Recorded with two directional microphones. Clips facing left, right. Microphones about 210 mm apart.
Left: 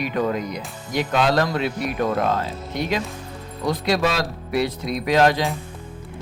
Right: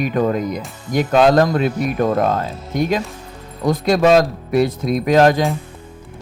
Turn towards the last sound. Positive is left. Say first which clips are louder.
# right 5 dB
turn(degrees=-45)  # may be behind; listen again after turning